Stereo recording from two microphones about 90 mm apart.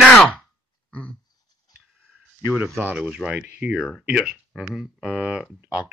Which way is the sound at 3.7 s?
5° right (ahead or behind).